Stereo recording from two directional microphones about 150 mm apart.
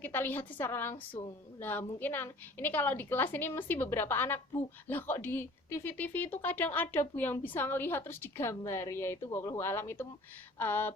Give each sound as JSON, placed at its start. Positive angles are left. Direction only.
{"t": 0.0, "sound": "a woman's voice", "side_deg": 10}